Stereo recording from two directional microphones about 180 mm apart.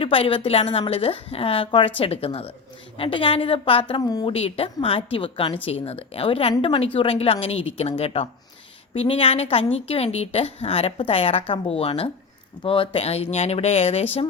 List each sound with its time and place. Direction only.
0.0 s a woman's voice: 30° left (ahead or behind)
4.3 s a woman's voice: 35° left (ahead or behind)